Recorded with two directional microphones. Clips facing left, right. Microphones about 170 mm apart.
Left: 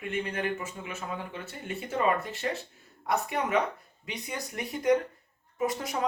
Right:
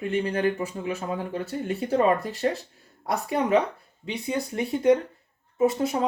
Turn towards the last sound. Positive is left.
turn(degrees=-25)  # may be behind; listen again after turning